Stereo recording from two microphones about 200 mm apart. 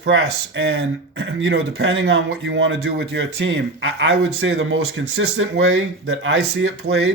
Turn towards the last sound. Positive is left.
turn(degrees=-80)